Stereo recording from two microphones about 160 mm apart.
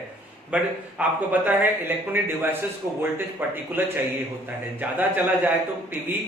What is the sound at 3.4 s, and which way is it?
A man's voice, 10° right (ahead or behind).